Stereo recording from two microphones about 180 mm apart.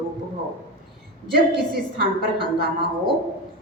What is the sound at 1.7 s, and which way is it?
Speech, 60° right (ahead or behind).